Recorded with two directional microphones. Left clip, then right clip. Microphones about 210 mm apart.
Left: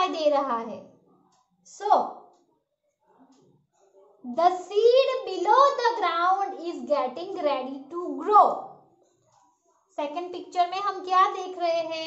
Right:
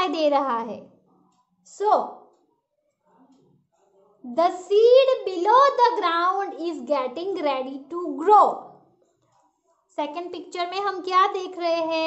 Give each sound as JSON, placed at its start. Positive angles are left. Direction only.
{"t": 0.0, "sound": "a woman's voice", "side_deg": -55}
{"t": 4.3, "sound": "a child's voice", "side_deg": -55}
{"t": 9.9, "sound": "a child's voice", "side_deg": -50}